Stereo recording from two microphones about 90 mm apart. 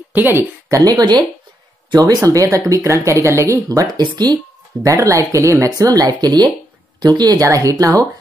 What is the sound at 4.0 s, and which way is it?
Speech, 50° right (ahead or behind).